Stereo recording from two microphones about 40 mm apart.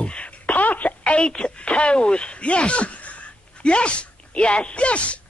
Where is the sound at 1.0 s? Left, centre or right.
Left.